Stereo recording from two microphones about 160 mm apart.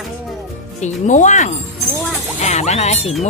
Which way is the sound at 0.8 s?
50° left (ahead or behind).